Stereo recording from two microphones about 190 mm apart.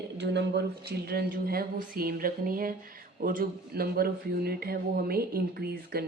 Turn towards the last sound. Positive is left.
turn(degrees=-55)  # may be behind; listen again after turning